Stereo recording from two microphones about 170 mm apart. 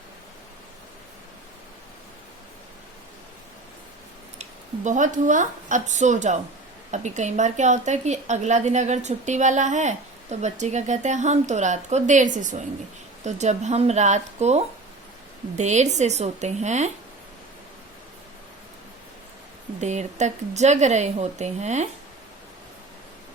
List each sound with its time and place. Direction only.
4.4 s a woman's voice: 45° right (ahead or behind)
19.8 s a woman's voice: 45° right (ahead or behind)